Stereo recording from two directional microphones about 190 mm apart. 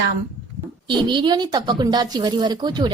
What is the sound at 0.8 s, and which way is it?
Speech, 25° right (ahead or behind).